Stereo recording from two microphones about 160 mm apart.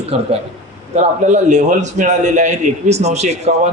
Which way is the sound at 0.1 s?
40° right (ahead or behind).